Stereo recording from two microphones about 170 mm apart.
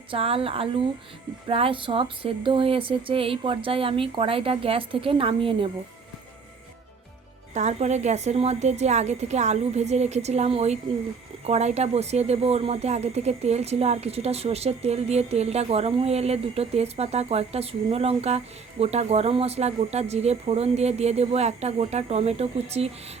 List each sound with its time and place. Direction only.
0.1 s speech: 35° right (ahead or behind)
7.5 s speech: 40° right (ahead or behind)